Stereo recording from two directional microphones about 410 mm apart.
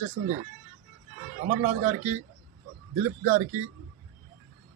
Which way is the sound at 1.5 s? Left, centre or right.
Centre.